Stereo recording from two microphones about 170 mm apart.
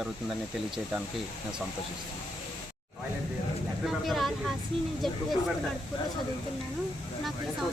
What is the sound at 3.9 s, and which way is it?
Speech, centre (ahead or behind).